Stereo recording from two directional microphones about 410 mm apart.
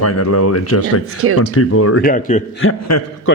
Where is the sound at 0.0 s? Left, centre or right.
Left.